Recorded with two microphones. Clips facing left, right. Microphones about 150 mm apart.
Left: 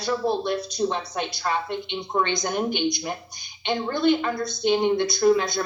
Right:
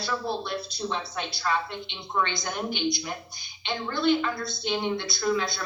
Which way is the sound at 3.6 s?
50° left (ahead or behind).